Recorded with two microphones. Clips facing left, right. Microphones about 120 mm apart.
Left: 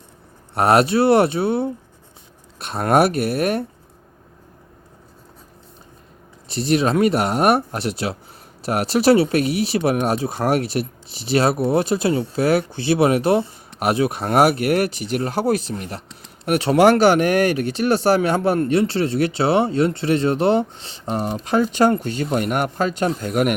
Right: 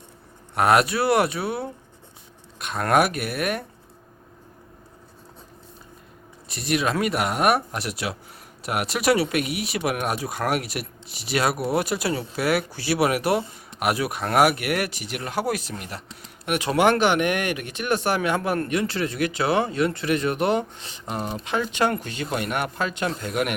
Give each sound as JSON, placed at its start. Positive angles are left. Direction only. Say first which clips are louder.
{"t": 0.5, "sound": "speech", "louder": "left 4 dB", "side_deg": 35}
{"t": 6.5, "sound": "a man's voice", "louder": "left 6 dB", "side_deg": 30}